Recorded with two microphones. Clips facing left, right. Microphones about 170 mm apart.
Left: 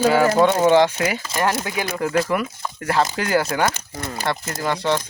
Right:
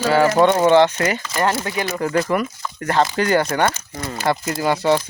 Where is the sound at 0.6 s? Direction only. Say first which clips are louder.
Right 2 dB; 10° left (ahead or behind).